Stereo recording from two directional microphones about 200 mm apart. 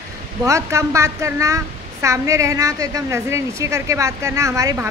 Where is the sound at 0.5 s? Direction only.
15° right (ahead or behind).